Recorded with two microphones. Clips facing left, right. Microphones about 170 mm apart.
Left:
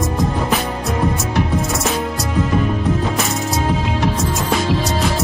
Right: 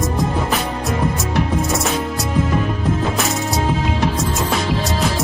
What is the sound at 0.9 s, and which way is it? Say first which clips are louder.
Music: left 2 dB; centre (ahead or behind).